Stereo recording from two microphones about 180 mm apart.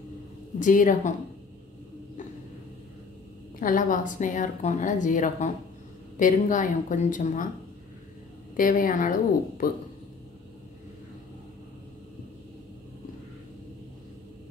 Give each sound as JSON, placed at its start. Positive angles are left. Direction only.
{"t": 0.6, "sound": "a woman's voice", "side_deg": 45}
{"t": 3.5, "sound": "a woman's voice", "side_deg": 50}
{"t": 8.5, "sound": "a woman's voice", "side_deg": 50}